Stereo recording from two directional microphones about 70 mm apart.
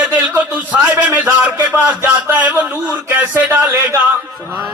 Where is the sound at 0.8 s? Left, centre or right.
Right.